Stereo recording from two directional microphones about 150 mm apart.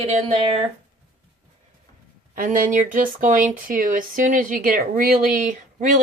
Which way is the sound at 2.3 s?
65° right (ahead or behind).